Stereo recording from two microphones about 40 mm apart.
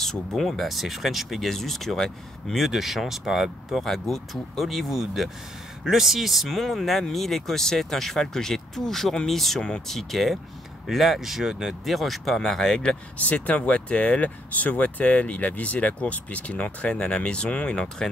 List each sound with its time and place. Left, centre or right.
0.0 s speech: centre
3.8 s speech: centre
12.4 s speech: centre
13.2 s speech: left